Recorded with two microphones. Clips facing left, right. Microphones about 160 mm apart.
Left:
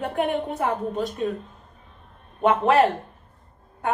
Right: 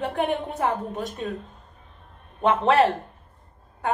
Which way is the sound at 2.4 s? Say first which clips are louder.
Left 1 dB; centre (ahead or behind).